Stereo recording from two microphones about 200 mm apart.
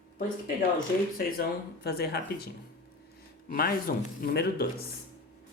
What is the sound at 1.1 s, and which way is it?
Speech, 50° left (ahead or behind).